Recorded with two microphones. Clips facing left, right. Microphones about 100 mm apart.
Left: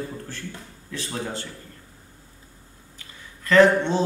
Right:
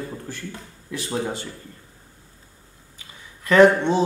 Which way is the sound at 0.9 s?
10° right (ahead or behind).